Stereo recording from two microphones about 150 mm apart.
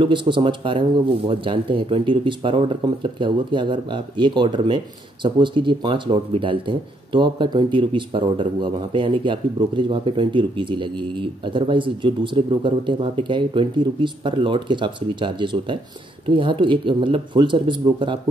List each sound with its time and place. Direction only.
0.0 s speech: 35° right (ahead or behind)